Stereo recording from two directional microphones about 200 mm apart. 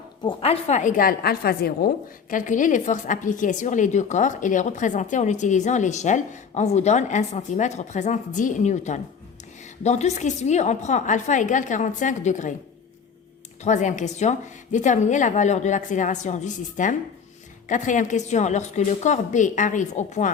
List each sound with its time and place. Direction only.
0.2 s a woman's voice: 25° left (ahead or behind); by 1.9 s 50° left (ahead or behind)
2.3 s a woman's voice: 40° left (ahead or behind)
13.6 s a woman's voice: 35° left (ahead or behind)